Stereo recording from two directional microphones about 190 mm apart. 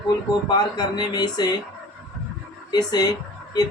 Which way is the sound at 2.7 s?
20° left (ahead or behind).